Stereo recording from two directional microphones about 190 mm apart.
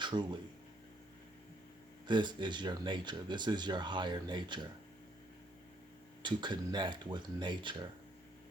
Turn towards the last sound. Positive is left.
turn(degrees=-25)  # may be behind; listen again after turning